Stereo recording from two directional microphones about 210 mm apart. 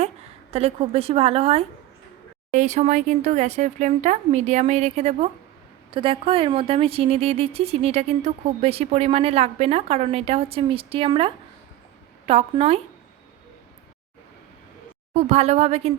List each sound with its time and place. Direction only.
0.5 s speech: 30° right (ahead or behind)
15.1 s speech: 30° right (ahead or behind)